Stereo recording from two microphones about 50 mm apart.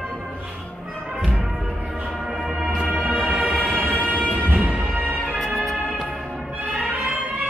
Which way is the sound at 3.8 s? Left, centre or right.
Left.